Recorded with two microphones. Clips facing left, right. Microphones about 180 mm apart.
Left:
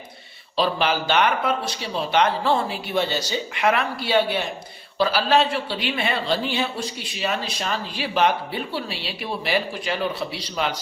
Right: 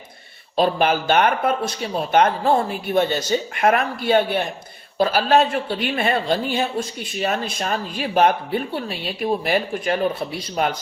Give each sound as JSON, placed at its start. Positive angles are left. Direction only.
{"t": 0.5, "sound": "speech", "side_deg": -50}